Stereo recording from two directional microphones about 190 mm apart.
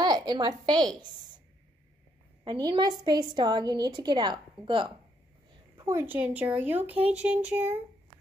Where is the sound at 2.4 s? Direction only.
25° right (ahead or behind).